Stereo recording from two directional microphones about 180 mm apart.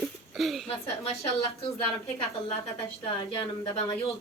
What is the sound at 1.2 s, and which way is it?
Speech, 35° left (ahead or behind).